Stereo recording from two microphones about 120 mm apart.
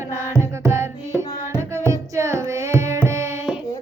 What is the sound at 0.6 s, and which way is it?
Music, 20° right (ahead or behind).